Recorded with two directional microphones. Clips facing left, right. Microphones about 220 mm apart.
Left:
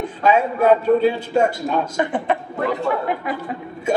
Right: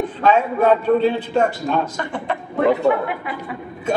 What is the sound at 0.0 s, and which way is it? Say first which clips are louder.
A man's voice: even; 10° left (ahead or behind).